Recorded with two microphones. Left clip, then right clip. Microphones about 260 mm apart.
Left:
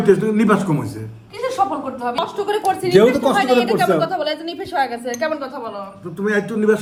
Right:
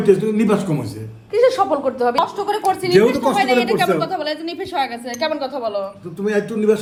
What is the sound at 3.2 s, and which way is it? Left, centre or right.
A woman's voice, left.